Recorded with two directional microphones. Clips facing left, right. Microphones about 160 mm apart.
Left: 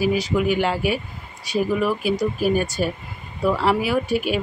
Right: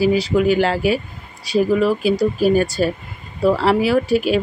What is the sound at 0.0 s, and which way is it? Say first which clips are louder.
Speech: right 5 dB; 30° right (ahead or behind).